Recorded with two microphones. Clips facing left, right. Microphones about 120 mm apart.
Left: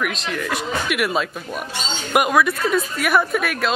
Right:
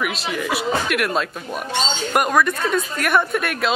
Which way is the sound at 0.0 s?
5° right (ahead or behind).